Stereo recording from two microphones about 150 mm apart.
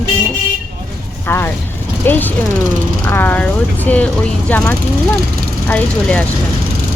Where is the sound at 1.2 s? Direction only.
15° left (ahead or behind).